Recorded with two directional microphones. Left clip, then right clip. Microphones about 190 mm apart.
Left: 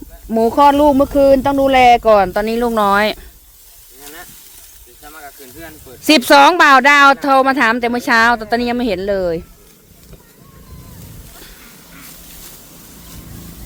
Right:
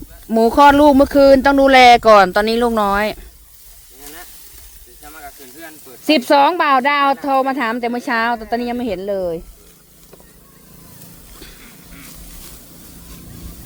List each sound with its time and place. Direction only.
0.3 s speech: 15° right (ahead or behind)
2.7 s speech: 5° left (ahead or behind)
4.0 s hiss: centre (ahead or behind)
6.1 s speech: 10° left (ahead or behind)